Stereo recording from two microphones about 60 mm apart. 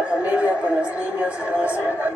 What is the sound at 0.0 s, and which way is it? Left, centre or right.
A woman's voice, right.